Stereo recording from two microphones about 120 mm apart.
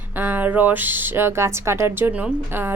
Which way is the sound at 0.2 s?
15° right (ahead or behind).